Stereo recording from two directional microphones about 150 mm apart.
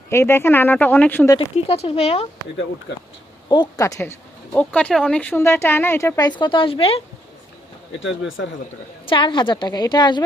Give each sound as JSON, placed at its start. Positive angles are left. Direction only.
{"t": 0.1, "sound": "speech", "side_deg": 15}
{"t": 1.4, "sound": "a woman's voice", "side_deg": 40}
{"t": 3.5, "sound": "a woman's voice", "side_deg": 25}
{"t": 4.5, "sound": "speech", "side_deg": 10}
{"t": 9.0, "sound": "a woman's voice", "side_deg": 35}